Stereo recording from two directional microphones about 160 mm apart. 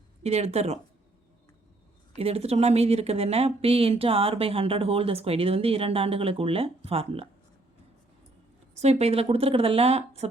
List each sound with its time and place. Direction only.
0.2 s speech: 45° right (ahead or behind)
2.1 s speech: 40° right (ahead or behind)
8.8 s speech: 40° right (ahead or behind)